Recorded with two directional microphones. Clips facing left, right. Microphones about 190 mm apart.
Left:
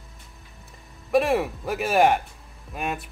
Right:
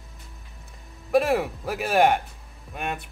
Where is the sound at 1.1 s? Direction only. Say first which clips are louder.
Even; centre (ahead or behind).